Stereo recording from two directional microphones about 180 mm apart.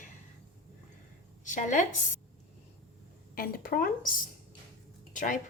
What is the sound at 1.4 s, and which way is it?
Speech, 45° left (ahead or behind).